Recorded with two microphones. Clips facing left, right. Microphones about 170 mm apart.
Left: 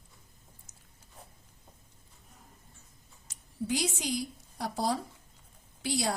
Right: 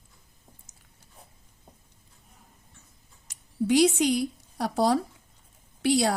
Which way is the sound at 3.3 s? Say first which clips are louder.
Right 9 dB; 70° right (ahead or behind).